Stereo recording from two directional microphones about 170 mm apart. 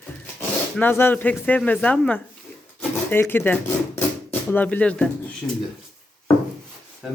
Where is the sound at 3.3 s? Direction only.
10° left (ahead or behind).